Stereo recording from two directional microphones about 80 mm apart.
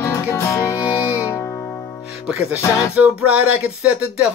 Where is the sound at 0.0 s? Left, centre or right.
Left.